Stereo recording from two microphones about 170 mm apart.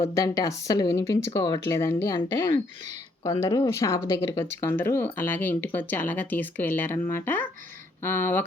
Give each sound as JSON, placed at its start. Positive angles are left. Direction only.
{"t": 0.0, "sound": "speech", "side_deg": 20}